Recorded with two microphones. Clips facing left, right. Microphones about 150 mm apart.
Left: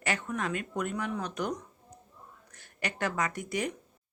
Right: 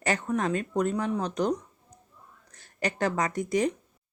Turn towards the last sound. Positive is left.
turn(degrees=-40)  # may be behind; listen again after turning